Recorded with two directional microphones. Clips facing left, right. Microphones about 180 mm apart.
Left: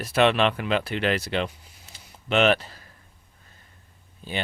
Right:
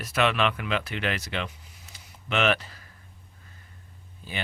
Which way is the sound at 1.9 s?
30° left (ahead or behind).